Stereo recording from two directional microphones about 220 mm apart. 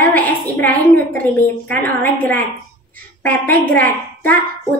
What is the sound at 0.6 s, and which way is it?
Speech, 10° left (ahead or behind).